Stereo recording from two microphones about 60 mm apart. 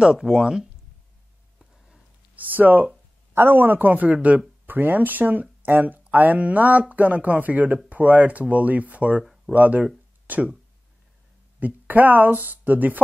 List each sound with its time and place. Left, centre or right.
0.2 s speech: centre
2.3 s speech: right
11.6 s speech: right